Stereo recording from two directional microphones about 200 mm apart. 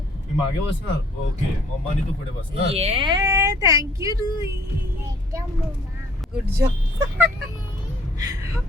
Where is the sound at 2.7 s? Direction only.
30° right (ahead or behind).